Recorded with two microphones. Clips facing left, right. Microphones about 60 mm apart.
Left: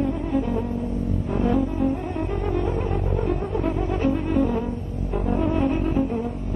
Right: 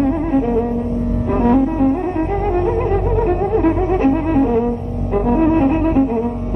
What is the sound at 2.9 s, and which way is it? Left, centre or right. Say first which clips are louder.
Music: right 9 dB; right.